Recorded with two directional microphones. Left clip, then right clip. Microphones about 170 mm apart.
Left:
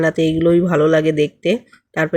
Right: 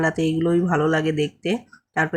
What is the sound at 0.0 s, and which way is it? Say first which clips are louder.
Speech: left 6 dB; 15° left (ahead or behind).